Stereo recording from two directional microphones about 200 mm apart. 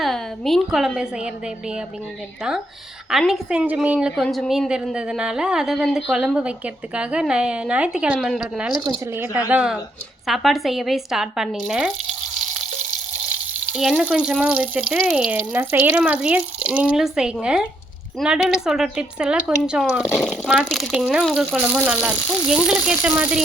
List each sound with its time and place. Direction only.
0.0 s a woman's voice: centre (ahead or behind)
8.8 s speech: 20° right (ahead or behind)
9.5 s a woman's voice: 5° right (ahead or behind)
13.7 s a woman's voice: centre (ahead or behind)